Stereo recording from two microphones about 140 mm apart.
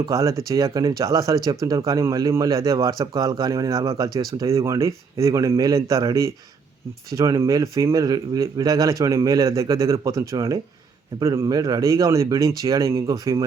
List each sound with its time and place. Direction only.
0.0 s a man's voice: 25° right (ahead or behind)